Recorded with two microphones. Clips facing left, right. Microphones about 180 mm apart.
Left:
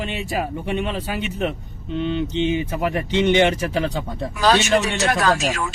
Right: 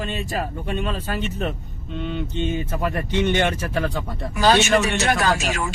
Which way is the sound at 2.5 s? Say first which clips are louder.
Left 3 dB; 15° left (ahead or behind).